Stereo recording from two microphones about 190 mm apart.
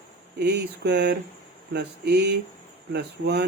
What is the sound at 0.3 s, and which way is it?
Speech, 60° right (ahead or behind).